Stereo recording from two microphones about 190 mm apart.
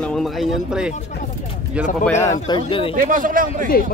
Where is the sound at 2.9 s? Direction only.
45° right (ahead or behind).